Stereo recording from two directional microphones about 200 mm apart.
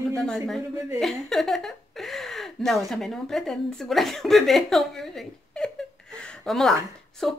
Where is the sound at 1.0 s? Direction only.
Centre (ahead or behind).